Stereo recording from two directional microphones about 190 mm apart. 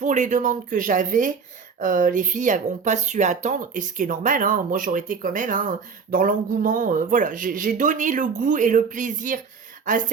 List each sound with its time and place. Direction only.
0.0 s speech: 40° right (ahead or behind)